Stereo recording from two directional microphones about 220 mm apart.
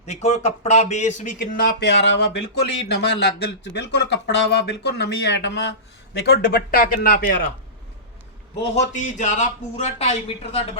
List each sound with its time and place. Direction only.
0.0 s speech: 30° left (ahead or behind)
8.7 s a man's voice: 30° left (ahead or behind)